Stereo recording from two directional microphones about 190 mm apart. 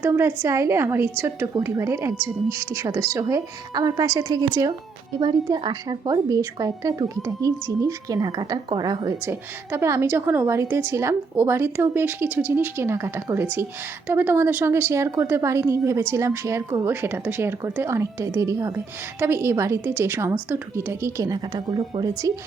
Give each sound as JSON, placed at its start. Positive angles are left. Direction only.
{"t": 0.0, "sound": "a woman's voice", "side_deg": -15}